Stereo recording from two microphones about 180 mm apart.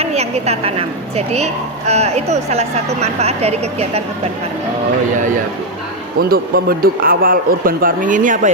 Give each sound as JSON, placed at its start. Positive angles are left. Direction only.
{"t": 0.0, "sound": "speech", "side_deg": -35}
{"t": 6.1, "sound": "speech", "side_deg": -55}